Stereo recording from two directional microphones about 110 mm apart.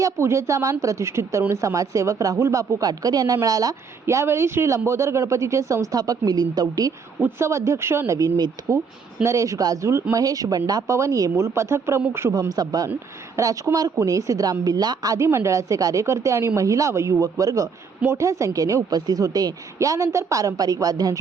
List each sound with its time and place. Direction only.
0.0 s speech: 25° right (ahead or behind)
4.0 s speech: 25° right (ahead or behind)
7.2 s speech: 20° right (ahead or behind)
12.3 s speech: 35° right (ahead or behind)